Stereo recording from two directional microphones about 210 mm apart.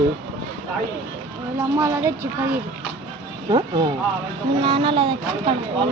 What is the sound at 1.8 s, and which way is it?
Speech, 10° right (ahead or behind).